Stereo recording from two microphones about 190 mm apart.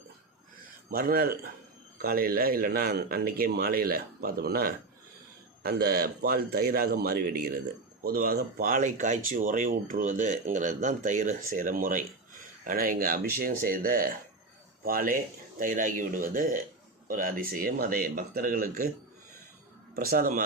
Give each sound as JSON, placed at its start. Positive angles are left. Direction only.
{"t": 0.9, "sound": "a man's voice", "side_deg": -50}
{"t": 20.0, "sound": "speech", "side_deg": -50}